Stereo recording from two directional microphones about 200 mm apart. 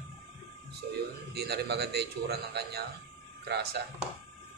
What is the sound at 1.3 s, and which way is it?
A man's voice, 55° right (ahead or behind).